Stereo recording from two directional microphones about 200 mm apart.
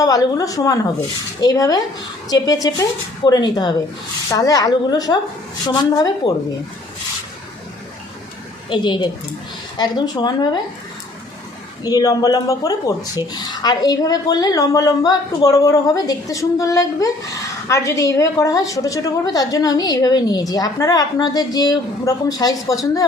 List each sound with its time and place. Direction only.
0.0 s a woman's voice: 15° left (ahead or behind)
8.7 s a woman's voice: 25° left (ahead or behind)
11.8 s a woman's voice: 20° left (ahead or behind)